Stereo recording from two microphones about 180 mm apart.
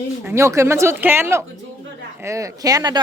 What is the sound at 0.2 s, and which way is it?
A woman's voice, 15° right (ahead or behind).